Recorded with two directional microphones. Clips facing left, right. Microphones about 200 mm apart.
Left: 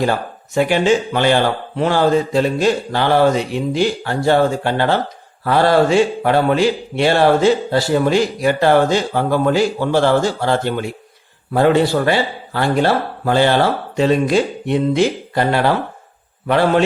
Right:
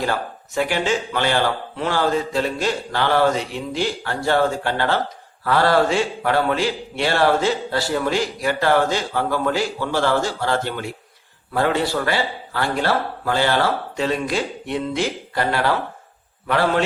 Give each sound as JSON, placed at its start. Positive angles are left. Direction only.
{"t": 0.0, "sound": "speech", "side_deg": 20}